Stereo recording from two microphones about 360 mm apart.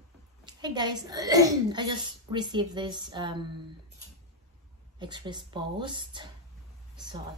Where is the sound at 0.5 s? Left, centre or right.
Centre.